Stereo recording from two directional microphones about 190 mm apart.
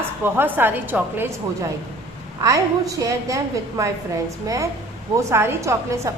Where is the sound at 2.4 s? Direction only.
20° right (ahead or behind).